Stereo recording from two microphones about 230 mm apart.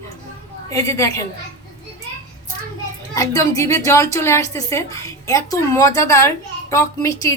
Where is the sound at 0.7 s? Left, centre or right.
Centre.